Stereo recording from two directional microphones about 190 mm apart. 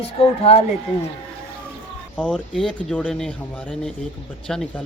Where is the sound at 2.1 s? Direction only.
5° left (ahead or behind).